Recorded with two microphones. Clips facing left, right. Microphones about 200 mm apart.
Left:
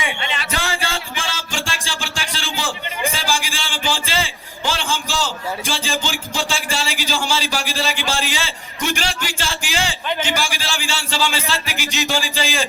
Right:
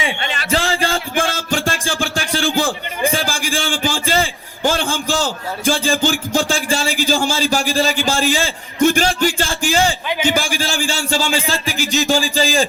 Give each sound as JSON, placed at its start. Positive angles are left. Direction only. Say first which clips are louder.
{"t": 0.2, "sound": "a sound", "louder": "right 2 dB", "side_deg": -45}
{"t": 0.5, "sound": "music", "louder": "right 8 dB", "side_deg": -35}
{"t": 0.9, "sound": "music", "louder": "right 8 dB", "side_deg": -50}
{"t": 10.2, "sound": "a man's voice", "louder": "right 5 dB", "side_deg": -50}